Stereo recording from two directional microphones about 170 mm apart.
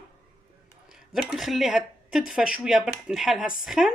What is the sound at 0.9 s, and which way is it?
Speech, centre (ahead or behind).